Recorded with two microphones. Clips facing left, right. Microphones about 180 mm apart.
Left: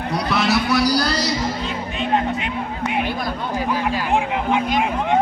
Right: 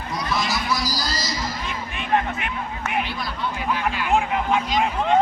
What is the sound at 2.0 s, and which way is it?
Speech, 20° left (ahead or behind).